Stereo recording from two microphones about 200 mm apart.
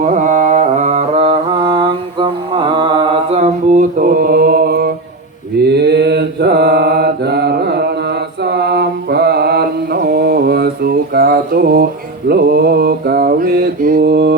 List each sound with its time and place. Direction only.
0.0 s mantra: 40° right (ahead or behind); by 14.3 s 55° right (ahead or behind)